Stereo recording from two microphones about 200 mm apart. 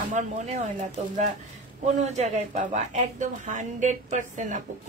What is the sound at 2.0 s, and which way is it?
A woman's voice, 35° right (ahead or behind).